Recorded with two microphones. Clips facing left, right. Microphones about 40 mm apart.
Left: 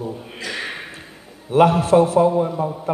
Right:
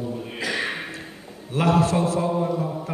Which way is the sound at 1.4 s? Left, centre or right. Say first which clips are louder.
Left 6 dB; left.